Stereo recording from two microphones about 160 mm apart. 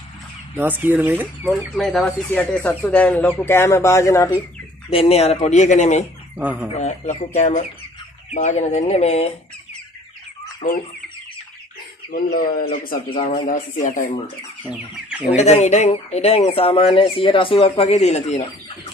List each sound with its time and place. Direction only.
0.6 s speech: 10° right (ahead or behind); by 4.4 s 15° left (ahead or behind)
4.9 s speech: 40° left (ahead or behind)
6.3 s speech: 10° right (ahead or behind)
6.7 s speech: 45° left (ahead or behind)
12.1 s speech: 65° left (ahead or behind)
14.6 s chicken: 5° right (ahead or behind)
15.3 s speech: 45° left (ahead or behind)